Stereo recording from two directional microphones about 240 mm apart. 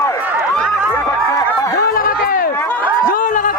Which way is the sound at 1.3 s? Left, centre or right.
Centre.